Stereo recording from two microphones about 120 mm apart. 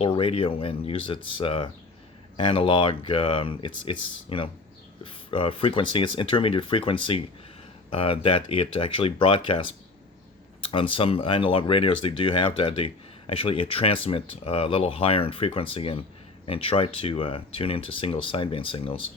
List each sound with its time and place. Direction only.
0.0 s speech: 50° left (ahead or behind)